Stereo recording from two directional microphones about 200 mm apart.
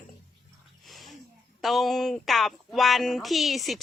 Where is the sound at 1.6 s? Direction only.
Centre (ahead or behind).